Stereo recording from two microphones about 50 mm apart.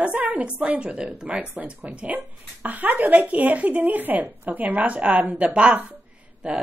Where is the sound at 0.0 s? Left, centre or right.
Right.